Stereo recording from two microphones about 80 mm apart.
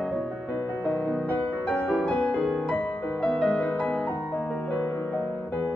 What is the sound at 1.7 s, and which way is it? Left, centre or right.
Music, centre.